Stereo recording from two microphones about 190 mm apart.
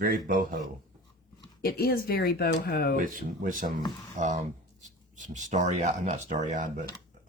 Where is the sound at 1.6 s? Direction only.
50° left (ahead or behind).